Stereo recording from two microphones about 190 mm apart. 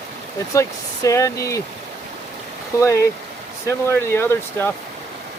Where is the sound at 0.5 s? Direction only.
15° left (ahead or behind).